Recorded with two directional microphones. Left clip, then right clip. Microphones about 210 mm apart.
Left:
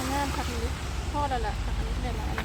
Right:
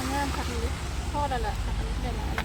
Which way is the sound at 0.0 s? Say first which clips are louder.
Even; 50° left (ahead or behind).